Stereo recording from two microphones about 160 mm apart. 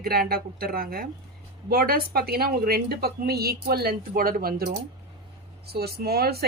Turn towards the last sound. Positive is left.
turn(degrees=-75)  # may be behind; listen again after turning